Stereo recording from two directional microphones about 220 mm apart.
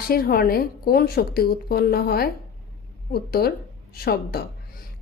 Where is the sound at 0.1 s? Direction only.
45° left (ahead or behind).